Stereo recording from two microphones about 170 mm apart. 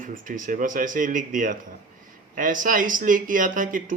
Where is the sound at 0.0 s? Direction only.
50° right (ahead or behind).